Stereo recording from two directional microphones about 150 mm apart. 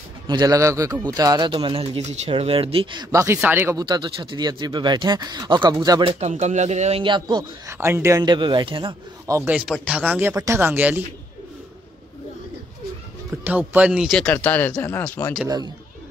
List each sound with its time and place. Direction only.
0.3 s speech: 25° right (ahead or behind)
3.1 s speech: 20° right (ahead or behind)
3.7 s speech: 30° right (ahead or behind)
6.1 s speech: 50° right (ahead or behind)
7.0 s speech: 30° right (ahead or behind)
7.7 s speech: 15° right (ahead or behind); by 8.9 s 35° right (ahead or behind)
9.3 s speech: 10° right (ahead or behind)
13.4 s speech: 10° right (ahead or behind)
14.1 s speech: 10° left (ahead or behind)
15.4 s speech: 25° right (ahead or behind)